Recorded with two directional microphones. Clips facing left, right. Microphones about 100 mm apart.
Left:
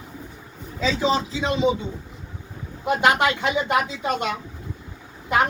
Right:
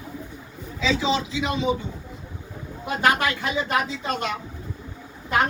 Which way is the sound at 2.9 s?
20° left (ahead or behind).